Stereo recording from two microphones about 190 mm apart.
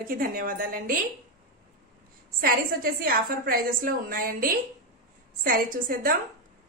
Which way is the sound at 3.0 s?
50° right (ahead or behind).